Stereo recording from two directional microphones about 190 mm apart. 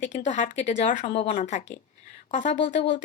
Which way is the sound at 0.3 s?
40° left (ahead or behind).